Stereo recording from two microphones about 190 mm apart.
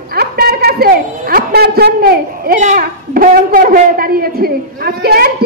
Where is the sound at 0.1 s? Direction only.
55° right (ahead or behind).